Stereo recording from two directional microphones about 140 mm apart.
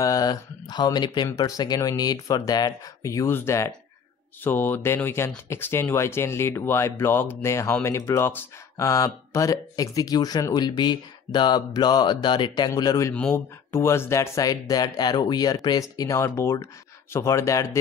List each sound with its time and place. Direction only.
0.0 s speech: 25° left (ahead or behind)
13.1 s speech: 10° left (ahead or behind)